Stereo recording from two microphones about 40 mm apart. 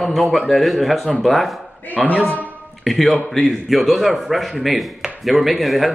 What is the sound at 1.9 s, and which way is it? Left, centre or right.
Speech, left.